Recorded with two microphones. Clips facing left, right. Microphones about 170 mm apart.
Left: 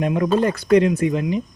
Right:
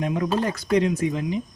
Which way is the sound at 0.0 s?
65° left (ahead or behind).